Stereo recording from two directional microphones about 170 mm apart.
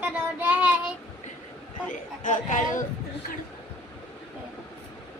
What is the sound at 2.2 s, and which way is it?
Speech, 45° left (ahead or behind).